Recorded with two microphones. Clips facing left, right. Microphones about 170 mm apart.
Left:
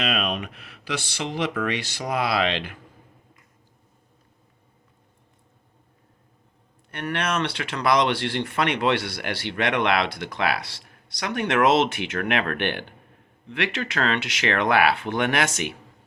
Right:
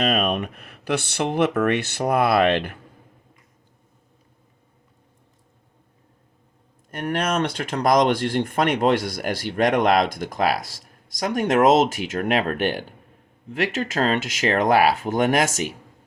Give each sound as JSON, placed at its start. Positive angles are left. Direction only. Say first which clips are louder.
{"t": 0.0, "sound": "speech", "louder": "right 5 dB", "side_deg": -50}
{"t": 6.9, "sound": "speech", "louder": "right 3 dB", "side_deg": -45}